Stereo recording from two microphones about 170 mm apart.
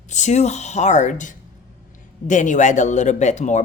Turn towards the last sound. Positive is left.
turn(degrees=45)  # may be behind; listen again after turning